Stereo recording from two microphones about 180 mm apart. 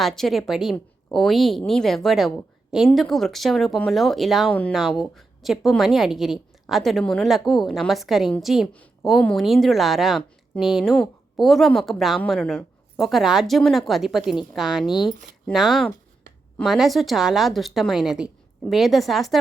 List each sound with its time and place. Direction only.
0.0 s a woman's voice: centre (ahead or behind)
14.8 s speech: 25° left (ahead or behind)
15.4 s a woman's voice: centre (ahead or behind)